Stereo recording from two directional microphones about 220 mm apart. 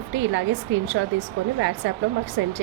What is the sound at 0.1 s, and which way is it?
Speech, 55° right (ahead or behind).